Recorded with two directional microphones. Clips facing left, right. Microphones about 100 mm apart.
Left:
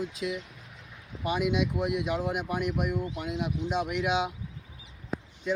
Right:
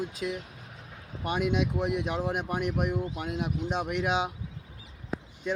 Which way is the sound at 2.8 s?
40° right (ahead or behind).